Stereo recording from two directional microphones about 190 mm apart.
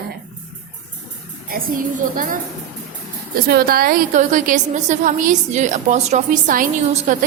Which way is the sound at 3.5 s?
55° right (ahead or behind).